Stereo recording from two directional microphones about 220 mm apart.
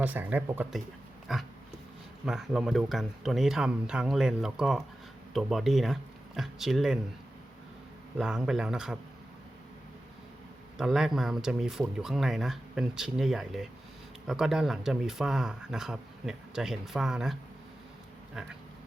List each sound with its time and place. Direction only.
0.0 s speech: 5° right (ahead or behind)
8.2 s speech: 5° right (ahead or behind)
10.8 s speech: centre (ahead or behind)
18.4 s speech: centre (ahead or behind)